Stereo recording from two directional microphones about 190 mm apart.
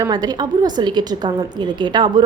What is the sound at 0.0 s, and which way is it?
A woman's voice, 20° right (ahead or behind).